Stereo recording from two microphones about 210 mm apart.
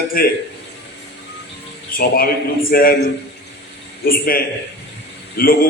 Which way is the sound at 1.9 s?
45° left (ahead or behind).